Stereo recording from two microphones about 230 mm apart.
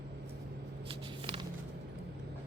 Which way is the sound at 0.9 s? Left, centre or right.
Right.